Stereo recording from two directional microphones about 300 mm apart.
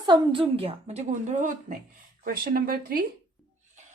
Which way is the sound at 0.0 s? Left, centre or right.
Centre.